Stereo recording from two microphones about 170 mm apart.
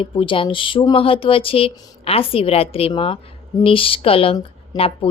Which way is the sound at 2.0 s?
35° left (ahead or behind).